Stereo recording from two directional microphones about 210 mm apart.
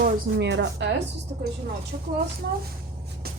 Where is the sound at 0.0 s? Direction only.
55° right (ahead or behind).